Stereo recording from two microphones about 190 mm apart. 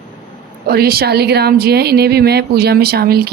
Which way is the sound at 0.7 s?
55° right (ahead or behind).